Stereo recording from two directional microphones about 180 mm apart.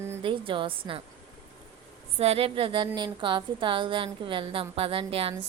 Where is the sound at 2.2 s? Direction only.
35° right (ahead or behind).